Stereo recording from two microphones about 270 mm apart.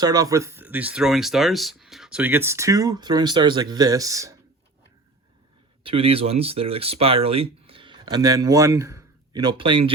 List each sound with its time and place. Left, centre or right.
0.0 s speech: centre
5.8 s speech: right